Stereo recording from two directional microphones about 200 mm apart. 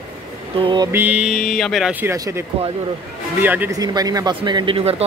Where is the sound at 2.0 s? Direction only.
15° right (ahead or behind).